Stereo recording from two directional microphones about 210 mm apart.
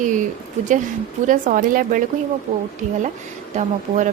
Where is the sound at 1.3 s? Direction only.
40° right (ahead or behind).